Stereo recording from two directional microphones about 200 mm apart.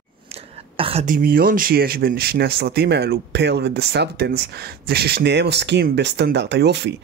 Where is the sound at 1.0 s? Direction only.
45° right (ahead or behind).